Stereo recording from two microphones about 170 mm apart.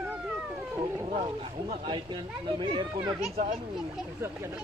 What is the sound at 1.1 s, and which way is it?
Speech, 35° right (ahead or behind).